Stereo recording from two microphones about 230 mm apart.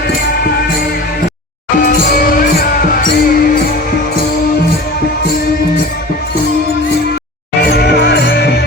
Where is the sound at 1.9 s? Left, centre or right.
Left.